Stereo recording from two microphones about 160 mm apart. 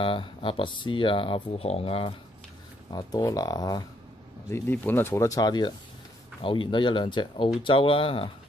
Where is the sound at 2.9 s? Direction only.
25° left (ahead or behind).